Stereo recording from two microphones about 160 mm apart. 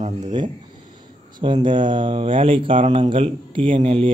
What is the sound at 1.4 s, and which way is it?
Speech, 30° right (ahead or behind).